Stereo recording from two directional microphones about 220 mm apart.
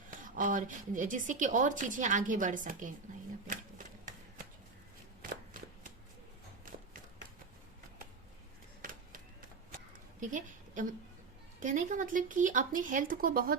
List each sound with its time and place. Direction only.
0.3 s a woman's voice: 35° right (ahead or behind)
3.5 s typewriter: 35° right (ahead or behind)
8.8 s a sound: 40° right (ahead or behind)
11.6 s a woman's voice: 35° right (ahead or behind)